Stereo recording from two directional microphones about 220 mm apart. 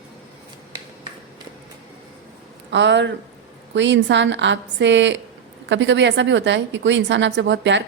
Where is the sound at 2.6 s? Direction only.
50° right (ahead or behind).